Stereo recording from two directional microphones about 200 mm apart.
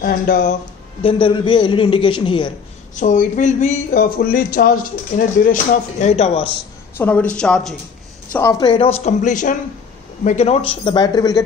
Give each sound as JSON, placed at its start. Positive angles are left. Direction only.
{"t": 0.0, "sound": "speech", "side_deg": 40}
{"t": 1.0, "sound": "a man's voice", "side_deg": 25}
{"t": 3.0, "sound": "speech", "side_deg": 35}
{"t": 7.0, "sound": "a woman's voice", "side_deg": 10}
{"t": 8.3, "sound": "a man's voice", "side_deg": 15}